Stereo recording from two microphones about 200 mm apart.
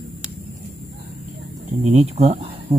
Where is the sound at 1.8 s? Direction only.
35° right (ahead or behind).